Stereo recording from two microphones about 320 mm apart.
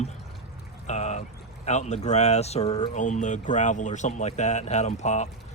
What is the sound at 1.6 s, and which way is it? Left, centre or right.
Speech, left.